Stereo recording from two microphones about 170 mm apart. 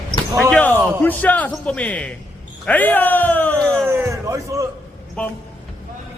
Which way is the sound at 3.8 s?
20° right (ahead or behind).